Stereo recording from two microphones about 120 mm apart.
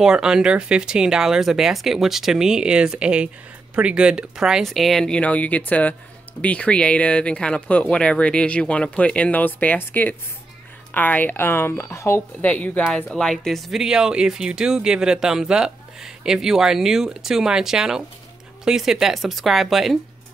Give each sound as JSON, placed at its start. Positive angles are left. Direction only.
{"t": 0.0, "sound": "speech", "side_deg": -5}